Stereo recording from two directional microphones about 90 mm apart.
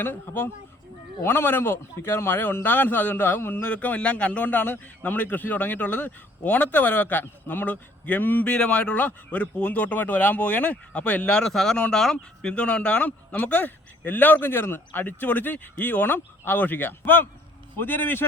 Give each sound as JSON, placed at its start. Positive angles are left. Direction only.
{"t": 0.0, "sound": "a man's voice", "side_deg": 20}